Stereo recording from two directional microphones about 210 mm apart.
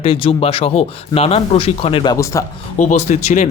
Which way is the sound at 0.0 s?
25° left (ahead or behind).